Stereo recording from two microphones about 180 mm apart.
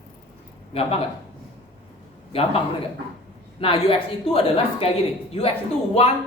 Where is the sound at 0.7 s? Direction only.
30° left (ahead or behind).